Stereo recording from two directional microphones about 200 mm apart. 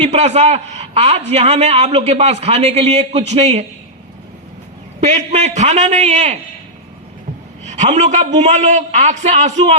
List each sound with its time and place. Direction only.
0.0 s a man's voice: 35° right (ahead or behind)
4.9 s a man's voice: 35° right (ahead or behind)
7.6 s a man's voice: 35° right (ahead or behind)